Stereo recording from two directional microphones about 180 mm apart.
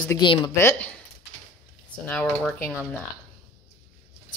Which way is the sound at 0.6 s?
10° left (ahead or behind).